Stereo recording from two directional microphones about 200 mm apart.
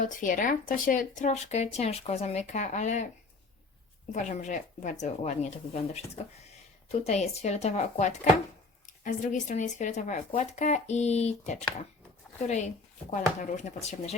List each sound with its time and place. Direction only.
0.0 s speech: 40° left (ahead or behind)
4.1 s speech: 35° left (ahead or behind)